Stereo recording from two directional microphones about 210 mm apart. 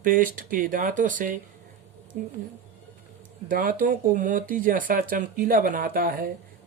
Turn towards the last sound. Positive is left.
turn(degrees=-40)  # may be behind; listen again after turning